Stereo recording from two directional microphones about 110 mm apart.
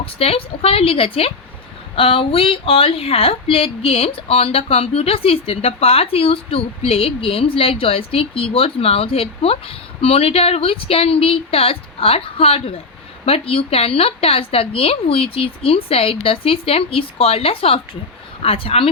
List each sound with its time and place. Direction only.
0.0 s speech: 60° left (ahead or behind)